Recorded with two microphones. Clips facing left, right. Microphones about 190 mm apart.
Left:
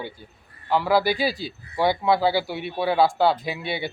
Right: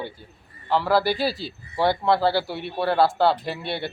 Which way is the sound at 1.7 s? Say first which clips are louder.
Even; 10° left (ahead or behind).